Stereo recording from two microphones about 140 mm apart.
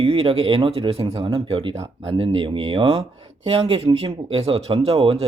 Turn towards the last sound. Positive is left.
turn(degrees=-45)  # may be behind; listen again after turning